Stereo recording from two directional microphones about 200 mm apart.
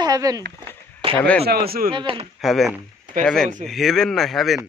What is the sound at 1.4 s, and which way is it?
Speech, 50° right (ahead or behind).